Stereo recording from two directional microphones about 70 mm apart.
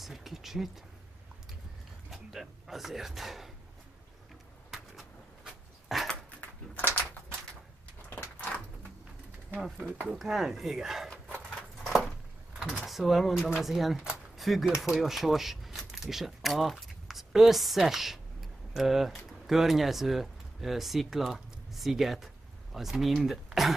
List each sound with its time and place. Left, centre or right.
0.0 s speech: centre
2.0 s speech: centre
4.6 s a sound: centre
6.7 s a sound: left
9.8 s speech: right
10.0 s speech: centre
11.8 s a sound: centre
12.8 s speech: centre
14.3 s typewriter: centre
14.8 s speech: centre